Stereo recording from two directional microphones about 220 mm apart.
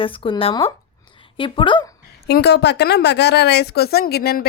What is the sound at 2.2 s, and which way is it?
A woman's voice, 50° left (ahead or behind).